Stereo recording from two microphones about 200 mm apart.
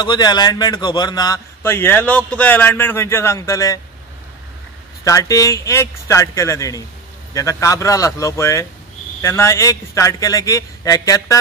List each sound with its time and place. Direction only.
0.0 s a man's voice: 20° left (ahead or behind)
5.0 s a man's voice: 15° left (ahead or behind)